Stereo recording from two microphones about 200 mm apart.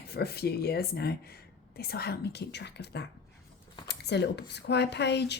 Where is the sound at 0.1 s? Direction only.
55° left (ahead or behind).